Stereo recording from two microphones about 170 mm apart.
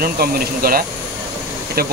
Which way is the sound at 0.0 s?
60° right (ahead or behind).